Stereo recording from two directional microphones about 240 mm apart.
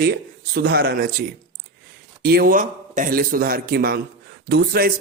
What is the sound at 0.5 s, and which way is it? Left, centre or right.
Speech, right.